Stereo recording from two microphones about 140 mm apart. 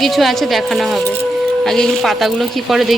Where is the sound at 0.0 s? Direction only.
Centre (ahead or behind).